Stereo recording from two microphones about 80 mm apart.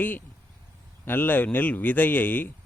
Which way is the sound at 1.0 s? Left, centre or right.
Left.